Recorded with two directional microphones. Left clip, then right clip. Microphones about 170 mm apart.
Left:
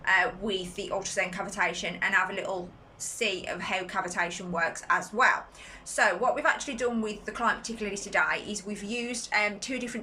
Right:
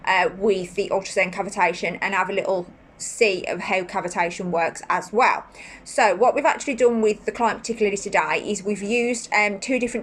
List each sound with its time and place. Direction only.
0.0 s a woman's voice: 25° right (ahead or behind)